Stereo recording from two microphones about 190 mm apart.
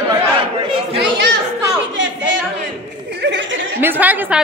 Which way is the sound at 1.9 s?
80° right.